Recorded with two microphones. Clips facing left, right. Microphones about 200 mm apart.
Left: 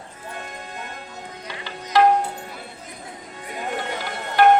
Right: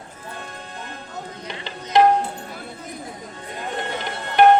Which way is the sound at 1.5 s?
20° right (ahead or behind).